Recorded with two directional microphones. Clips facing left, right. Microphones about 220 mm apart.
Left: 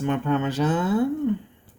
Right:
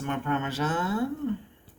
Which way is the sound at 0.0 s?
20° left (ahead or behind).